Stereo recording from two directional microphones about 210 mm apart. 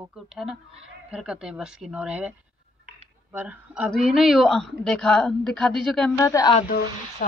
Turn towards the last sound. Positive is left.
turn(degrees=40)  # may be behind; listen again after turning